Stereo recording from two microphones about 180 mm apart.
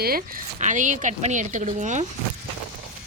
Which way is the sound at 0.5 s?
45° right (ahead or behind).